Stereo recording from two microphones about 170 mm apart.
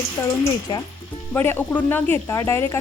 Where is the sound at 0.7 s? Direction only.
25° left (ahead or behind).